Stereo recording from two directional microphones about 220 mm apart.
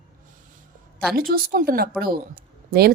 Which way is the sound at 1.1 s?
40° right (ahead or behind).